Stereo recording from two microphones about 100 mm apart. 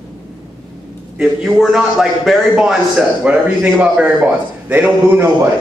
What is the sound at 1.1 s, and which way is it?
A man's voice, 5° right (ahead or behind).